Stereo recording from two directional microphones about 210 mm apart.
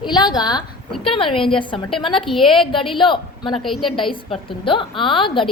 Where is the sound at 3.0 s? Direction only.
25° left (ahead or behind).